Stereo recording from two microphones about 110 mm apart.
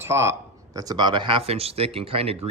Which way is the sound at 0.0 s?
25° right (ahead or behind).